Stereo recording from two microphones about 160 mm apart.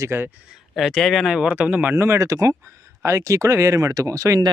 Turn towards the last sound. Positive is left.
turn(degrees=-20)  # may be behind; listen again after turning